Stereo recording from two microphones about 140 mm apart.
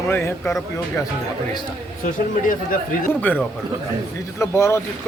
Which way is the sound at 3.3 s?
10° left (ahead or behind).